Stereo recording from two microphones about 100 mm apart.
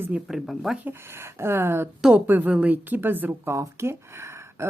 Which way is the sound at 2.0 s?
5° right (ahead or behind).